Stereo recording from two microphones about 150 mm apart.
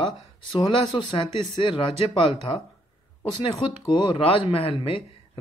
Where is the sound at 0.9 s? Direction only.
35° left (ahead or behind).